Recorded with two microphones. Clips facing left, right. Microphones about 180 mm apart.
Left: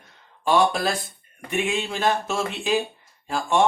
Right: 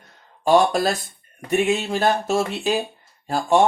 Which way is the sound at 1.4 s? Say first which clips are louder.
Right 5 dB; 40° right (ahead or behind).